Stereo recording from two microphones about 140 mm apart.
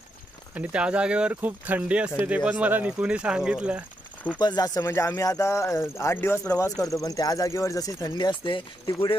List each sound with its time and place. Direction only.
0.6 s speech: 10° right (ahead or behind)
4.4 s speech: 30° left (ahead or behind)